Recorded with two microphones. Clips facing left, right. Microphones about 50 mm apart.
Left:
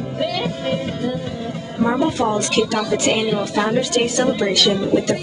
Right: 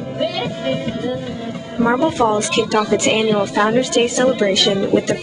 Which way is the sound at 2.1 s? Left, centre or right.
Centre.